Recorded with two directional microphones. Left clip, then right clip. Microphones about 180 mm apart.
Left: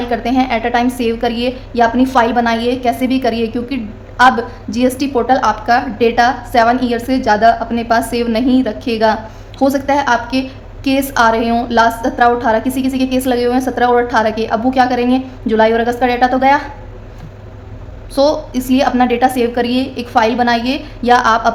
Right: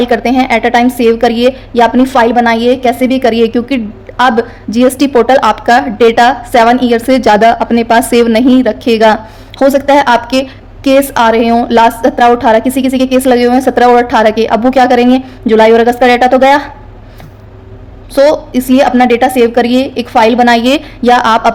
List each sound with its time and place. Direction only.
0.0 s a woman's voice: 40° right (ahead or behind)
18.1 s a woman's voice: 35° right (ahead or behind)